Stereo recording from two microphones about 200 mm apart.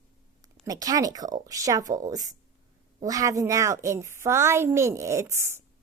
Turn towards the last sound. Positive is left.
turn(degrees=-15)  # may be behind; listen again after turning